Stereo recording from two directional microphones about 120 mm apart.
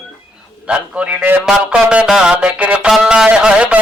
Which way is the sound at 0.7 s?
10° right (ahead or behind).